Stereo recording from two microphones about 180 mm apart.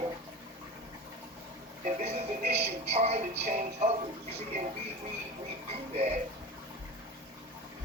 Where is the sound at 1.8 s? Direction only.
45° right (ahead or behind).